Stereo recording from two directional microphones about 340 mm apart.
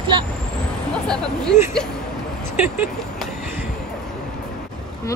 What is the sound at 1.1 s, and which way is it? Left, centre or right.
Speech, centre.